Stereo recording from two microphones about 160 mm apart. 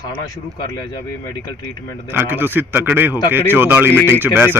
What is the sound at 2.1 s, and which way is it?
Speech, 15° right (ahead or behind).